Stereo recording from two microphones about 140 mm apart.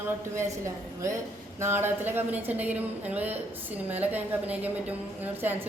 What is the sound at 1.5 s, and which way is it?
A woman's voice, 15° right (ahead or behind).